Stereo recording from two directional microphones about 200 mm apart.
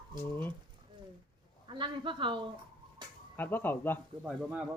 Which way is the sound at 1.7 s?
25° right (ahead or behind).